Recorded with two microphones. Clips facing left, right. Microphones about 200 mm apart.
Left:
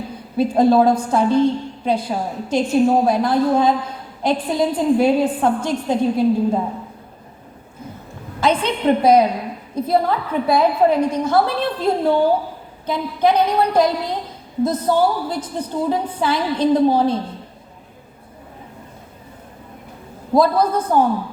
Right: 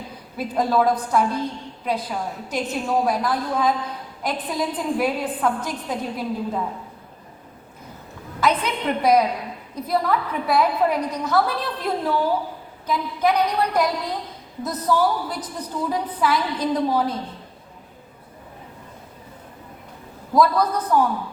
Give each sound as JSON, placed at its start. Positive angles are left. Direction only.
{"t": 0.3, "sound": "a woman's voice", "side_deg": 30}
{"t": 8.4, "sound": "a woman's voice", "side_deg": 30}
{"t": 20.3, "sound": "a woman's voice", "side_deg": 30}